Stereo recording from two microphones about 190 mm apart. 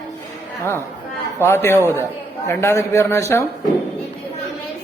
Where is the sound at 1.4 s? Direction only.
10° left (ahead or behind).